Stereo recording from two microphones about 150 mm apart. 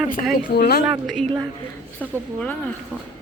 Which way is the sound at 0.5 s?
90° left.